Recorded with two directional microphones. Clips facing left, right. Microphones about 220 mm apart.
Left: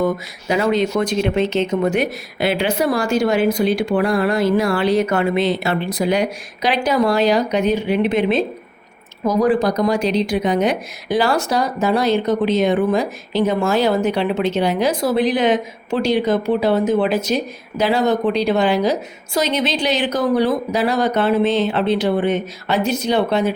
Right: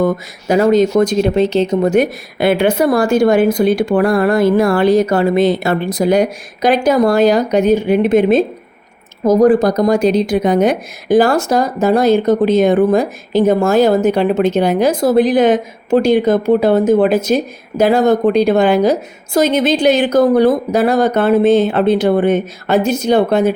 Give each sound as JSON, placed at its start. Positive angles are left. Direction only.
{"t": 0.0, "sound": "speech", "side_deg": -45}